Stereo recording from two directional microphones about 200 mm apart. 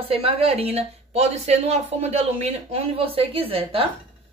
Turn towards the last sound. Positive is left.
turn(degrees=-25)  # may be behind; listen again after turning